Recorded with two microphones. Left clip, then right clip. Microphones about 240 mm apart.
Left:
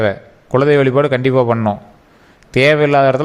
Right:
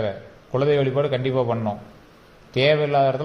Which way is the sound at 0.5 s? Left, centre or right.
Left.